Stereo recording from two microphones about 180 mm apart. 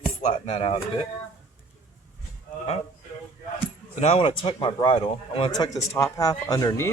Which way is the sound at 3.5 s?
35° left (ahead or behind).